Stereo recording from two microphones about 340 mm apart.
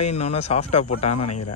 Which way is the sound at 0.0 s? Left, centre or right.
Centre.